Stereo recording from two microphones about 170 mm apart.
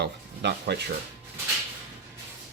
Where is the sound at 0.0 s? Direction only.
75° right (ahead or behind).